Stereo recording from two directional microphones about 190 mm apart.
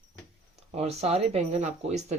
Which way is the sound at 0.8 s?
35° right (ahead or behind).